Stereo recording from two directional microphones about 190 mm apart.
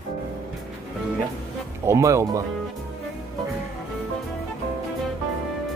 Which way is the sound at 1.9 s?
15° right (ahead or behind).